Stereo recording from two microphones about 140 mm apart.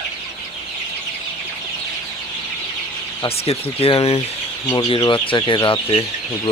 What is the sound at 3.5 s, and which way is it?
Speech, 40° left (ahead or behind).